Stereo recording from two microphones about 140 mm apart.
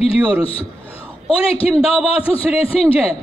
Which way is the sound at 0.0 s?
45° left (ahead or behind).